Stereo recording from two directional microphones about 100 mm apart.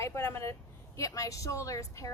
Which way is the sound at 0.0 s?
25° left (ahead or behind).